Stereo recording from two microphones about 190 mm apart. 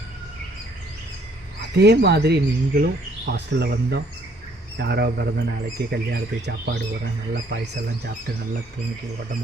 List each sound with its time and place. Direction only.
1.7 s speech: 60° right (ahead or behind)